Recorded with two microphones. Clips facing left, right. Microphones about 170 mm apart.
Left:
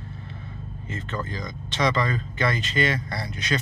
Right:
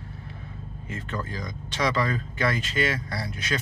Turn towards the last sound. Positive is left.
turn(degrees=-5)  # may be behind; listen again after turning